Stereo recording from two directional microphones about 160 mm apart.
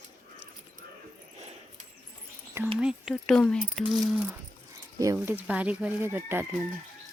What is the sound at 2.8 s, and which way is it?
Speech, centre (ahead or behind).